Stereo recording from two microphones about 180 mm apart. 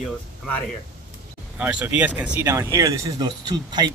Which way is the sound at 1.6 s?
5° right (ahead or behind).